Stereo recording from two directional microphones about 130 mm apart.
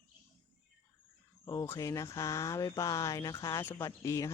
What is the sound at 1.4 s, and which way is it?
Speech, 25° left (ahead or behind).